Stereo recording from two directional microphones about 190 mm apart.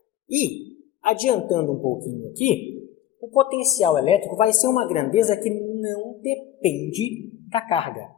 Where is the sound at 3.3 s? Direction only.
30° left (ahead or behind).